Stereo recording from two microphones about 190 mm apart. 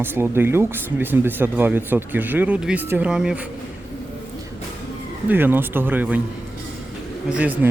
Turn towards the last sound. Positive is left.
turn(degrees=-10)  # may be behind; listen again after turning